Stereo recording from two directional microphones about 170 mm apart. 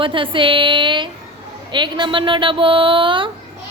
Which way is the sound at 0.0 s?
30° right (ahead or behind).